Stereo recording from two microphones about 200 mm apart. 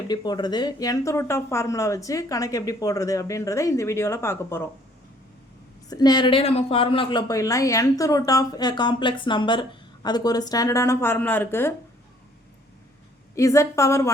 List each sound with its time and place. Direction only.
0.1 s speech: 20° left (ahead or behind)
5.9 s a woman's voice: 20° left (ahead or behind)
13.3 s speech: 15° left (ahead or behind)